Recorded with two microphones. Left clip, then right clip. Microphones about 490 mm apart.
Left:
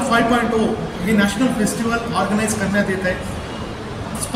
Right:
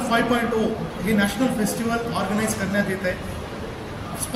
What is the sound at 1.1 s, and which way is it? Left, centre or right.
A man's voice, right.